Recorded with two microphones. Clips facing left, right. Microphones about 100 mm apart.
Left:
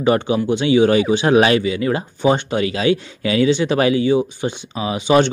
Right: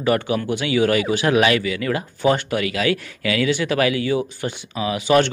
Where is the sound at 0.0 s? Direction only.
25° left (ahead or behind).